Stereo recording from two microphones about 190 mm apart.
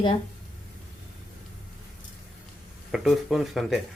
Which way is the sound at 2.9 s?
Centre (ahead or behind).